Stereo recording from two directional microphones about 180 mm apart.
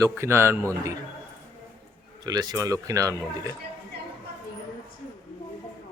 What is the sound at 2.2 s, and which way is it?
Speech, 20° right (ahead or behind).